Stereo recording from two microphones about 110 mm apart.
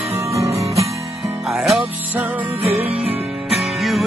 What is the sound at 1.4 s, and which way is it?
Music, centre (ahead or behind).